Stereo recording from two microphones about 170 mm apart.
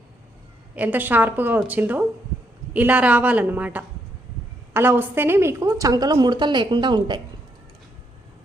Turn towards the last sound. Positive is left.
turn(degrees=-25)  # may be behind; listen again after turning